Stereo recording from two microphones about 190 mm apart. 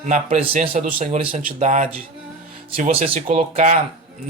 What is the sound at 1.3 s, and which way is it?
Speech, 40° right (ahead or behind).